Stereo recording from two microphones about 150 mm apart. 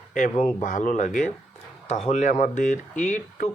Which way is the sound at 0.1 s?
55° left (ahead or behind).